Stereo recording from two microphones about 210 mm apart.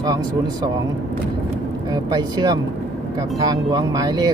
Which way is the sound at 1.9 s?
20° right (ahead or behind).